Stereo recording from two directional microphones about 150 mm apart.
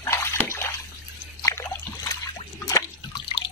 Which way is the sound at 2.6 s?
25° left (ahead or behind).